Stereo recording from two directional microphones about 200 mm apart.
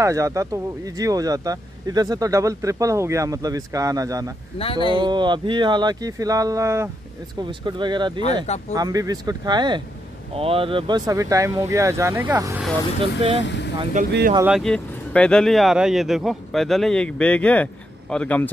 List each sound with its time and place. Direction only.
0.0 s speech: 15° right (ahead or behind)
4.6 s speech: 25° left (ahead or behind)
4.9 s speech: 20° right (ahead or behind)
13.0 s speech: 30° right (ahead or behind)
13.4 s speech: 60° left (ahead or behind)
14.0 s speech: 40° right (ahead or behind)
14.4 s speech: centre (ahead or behind)